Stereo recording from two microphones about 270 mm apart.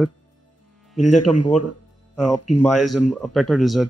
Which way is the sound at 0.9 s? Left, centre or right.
Left.